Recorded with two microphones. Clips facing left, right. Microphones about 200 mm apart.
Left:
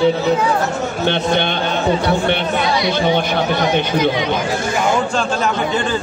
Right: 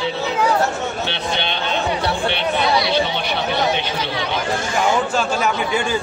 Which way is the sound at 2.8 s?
50° left (ahead or behind).